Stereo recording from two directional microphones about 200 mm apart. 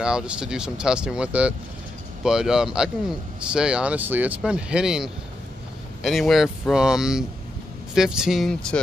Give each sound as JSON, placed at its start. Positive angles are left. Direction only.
{"t": 0.0, "sound": "speech", "side_deg": -5}